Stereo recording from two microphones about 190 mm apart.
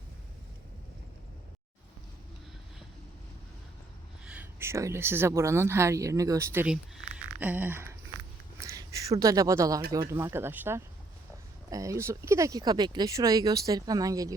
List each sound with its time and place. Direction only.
4.3 s speech: 10° right (ahead or behind)
8.5 s a sound: 15° right (ahead or behind)
10.1 s speech: 15° right (ahead or behind)